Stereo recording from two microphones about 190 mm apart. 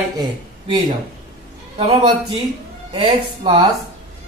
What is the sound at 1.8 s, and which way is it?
A man's voice, 30° right (ahead or behind).